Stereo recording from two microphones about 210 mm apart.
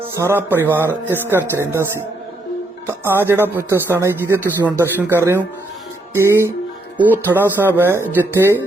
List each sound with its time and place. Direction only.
0.2 s speech: 10° right (ahead or behind)